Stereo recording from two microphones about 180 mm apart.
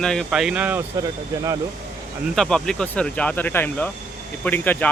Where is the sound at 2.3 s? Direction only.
5° left (ahead or behind).